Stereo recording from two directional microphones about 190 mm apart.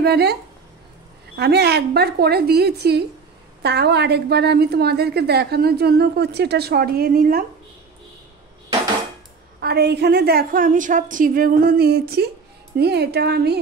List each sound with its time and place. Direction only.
0.0 s a woman's voice: 60° right (ahead or behind)
9.6 s a woman's voice: 60° right (ahead or behind)